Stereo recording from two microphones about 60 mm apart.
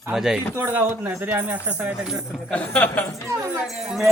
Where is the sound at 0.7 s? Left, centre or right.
Right.